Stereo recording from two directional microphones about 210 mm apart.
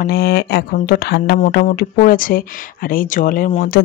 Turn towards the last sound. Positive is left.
turn(degrees=40)  # may be behind; listen again after turning